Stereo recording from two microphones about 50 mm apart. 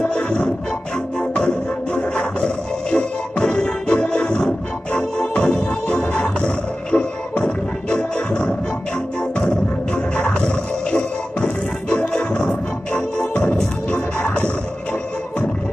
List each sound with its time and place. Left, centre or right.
0.0 s music: centre
13.9 s music: left